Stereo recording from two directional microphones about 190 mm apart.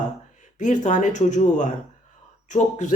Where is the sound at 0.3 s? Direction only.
40° left (ahead or behind).